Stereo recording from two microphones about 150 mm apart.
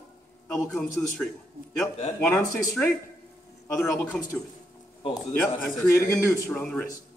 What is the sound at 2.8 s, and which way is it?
A man's voice, 10° left (ahead or behind).